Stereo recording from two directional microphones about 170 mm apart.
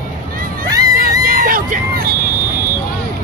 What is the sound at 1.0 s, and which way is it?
Music, 55° right (ahead or behind).